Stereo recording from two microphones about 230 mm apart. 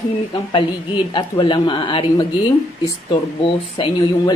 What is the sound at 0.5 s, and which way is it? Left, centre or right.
Speech, left.